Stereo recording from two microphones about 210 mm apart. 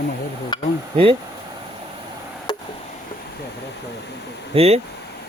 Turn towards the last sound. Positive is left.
turn(degrees=-30)  # may be behind; listen again after turning